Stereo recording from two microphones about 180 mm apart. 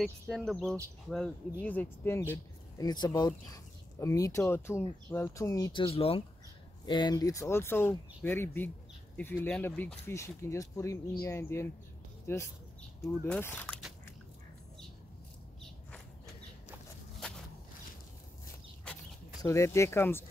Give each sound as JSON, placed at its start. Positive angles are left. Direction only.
{"t": 0.0, "sound": "speech", "side_deg": 0}
{"t": 19.4, "sound": "speech", "side_deg": 15}